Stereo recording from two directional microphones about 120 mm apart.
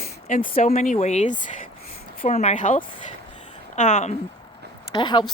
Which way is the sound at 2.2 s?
75° left (ahead or behind).